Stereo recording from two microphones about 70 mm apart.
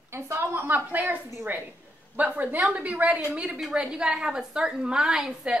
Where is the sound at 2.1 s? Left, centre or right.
Right.